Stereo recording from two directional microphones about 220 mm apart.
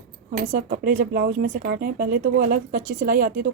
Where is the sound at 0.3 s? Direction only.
40° right (ahead or behind).